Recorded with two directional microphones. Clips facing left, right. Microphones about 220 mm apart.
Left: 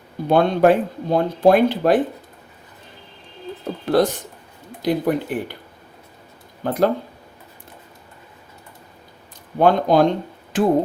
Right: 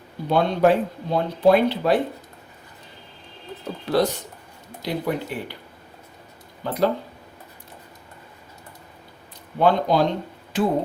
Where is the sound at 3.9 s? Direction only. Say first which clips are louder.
Left 3 dB; 50° left (ahead or behind).